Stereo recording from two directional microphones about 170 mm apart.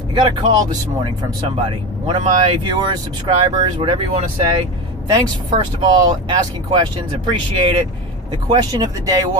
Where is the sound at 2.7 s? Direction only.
25° right (ahead or behind).